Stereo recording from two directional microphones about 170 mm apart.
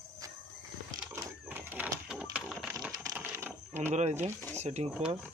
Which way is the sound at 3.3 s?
15° right (ahead or behind).